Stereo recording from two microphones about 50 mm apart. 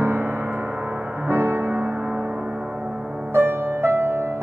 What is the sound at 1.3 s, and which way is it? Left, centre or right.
Music, right.